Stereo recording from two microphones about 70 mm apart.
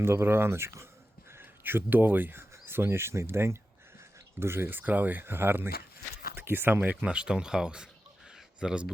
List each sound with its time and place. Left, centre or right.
0.0 s speech: right
6.9 s speech: centre